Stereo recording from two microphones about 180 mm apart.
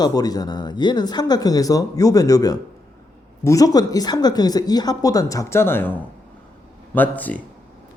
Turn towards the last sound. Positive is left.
turn(degrees=10)  # may be behind; listen again after turning